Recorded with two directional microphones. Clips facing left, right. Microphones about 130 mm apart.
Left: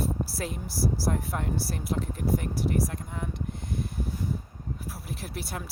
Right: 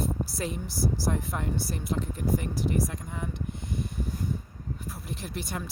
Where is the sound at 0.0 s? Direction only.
Centre (ahead or behind).